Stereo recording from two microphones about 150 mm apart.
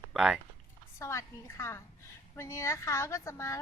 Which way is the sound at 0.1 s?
Centre (ahead or behind).